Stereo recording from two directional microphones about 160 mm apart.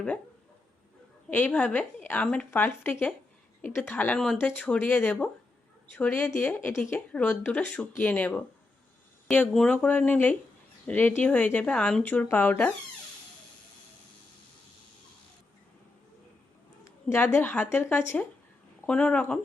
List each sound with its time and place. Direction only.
1.3 s a woman's voice: 10° left (ahead or behind)
16.8 s a woman's voice: 15° left (ahead or behind)